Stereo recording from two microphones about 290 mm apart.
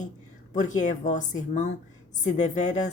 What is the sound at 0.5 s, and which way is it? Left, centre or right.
A woman's voice, left.